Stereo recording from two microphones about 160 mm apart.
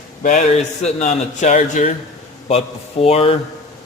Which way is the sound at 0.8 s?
50° left (ahead or behind).